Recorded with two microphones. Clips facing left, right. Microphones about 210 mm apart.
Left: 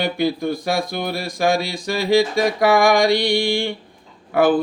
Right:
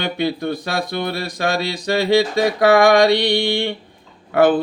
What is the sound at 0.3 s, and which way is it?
Mantra, 60° right (ahead or behind).